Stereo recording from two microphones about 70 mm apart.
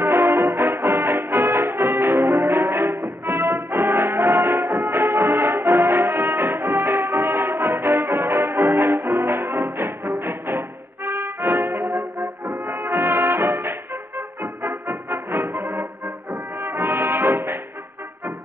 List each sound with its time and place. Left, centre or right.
0.0 s music: right
11.1 s brass instrument: right